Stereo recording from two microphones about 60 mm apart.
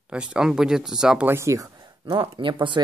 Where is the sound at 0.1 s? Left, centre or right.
Centre.